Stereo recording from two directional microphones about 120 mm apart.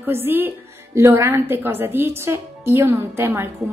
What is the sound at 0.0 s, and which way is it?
A woman's voice, 15° right (ahead or behind).